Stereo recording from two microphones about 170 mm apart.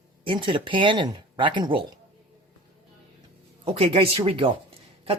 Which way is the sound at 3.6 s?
35° right (ahead or behind).